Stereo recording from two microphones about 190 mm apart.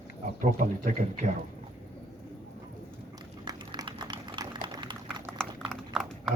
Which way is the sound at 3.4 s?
20° right (ahead or behind).